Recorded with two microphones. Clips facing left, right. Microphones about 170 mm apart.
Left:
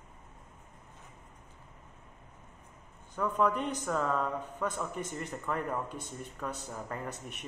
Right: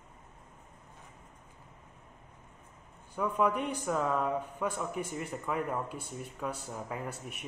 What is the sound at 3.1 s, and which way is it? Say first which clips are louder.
Speech: even; 10° right (ahead or behind).